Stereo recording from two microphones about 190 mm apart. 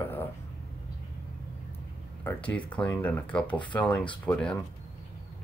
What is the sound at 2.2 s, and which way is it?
Speech, 5° left (ahead or behind).